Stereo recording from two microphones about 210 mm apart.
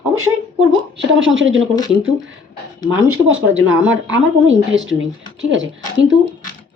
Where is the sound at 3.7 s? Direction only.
5° right (ahead or behind).